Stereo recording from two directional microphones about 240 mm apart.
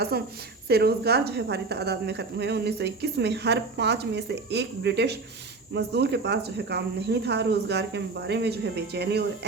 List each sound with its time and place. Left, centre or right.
0.1 s a woman's voice: right